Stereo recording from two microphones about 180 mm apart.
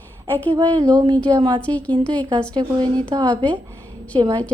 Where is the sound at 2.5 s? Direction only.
25° right (ahead or behind).